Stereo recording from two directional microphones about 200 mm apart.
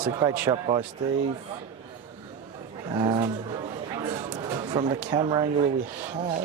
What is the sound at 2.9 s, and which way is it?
Speech, 25° right (ahead or behind).